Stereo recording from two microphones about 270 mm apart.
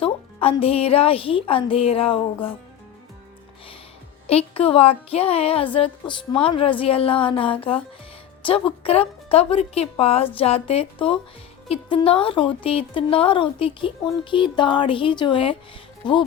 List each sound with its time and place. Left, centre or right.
0.0 s a woman's voice: centre
4.3 s a woman's voice: left